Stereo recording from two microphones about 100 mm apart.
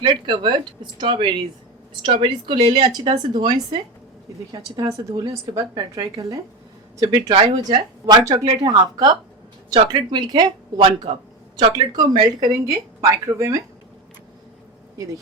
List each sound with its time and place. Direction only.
0.1 s a woman's voice: 50° right (ahead or behind)
4.5 s a woman's voice: 35° right (ahead or behind)
7.7 s speech: 55° right (ahead or behind)
8.2 s a woman's voice: 35° right (ahead or behind)
10.8 s speech: 55° right (ahead or behind)
11.7 s a woman's voice: 45° right (ahead or behind)